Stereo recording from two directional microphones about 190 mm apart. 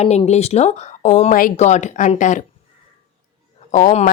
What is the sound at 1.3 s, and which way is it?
Speech, 45° left (ahead or behind).